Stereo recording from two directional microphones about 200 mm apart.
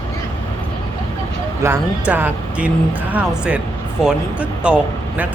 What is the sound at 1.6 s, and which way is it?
Speech, 15° right (ahead or behind).